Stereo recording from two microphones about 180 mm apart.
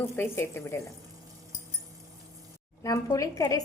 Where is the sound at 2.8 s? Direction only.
20° left (ahead or behind).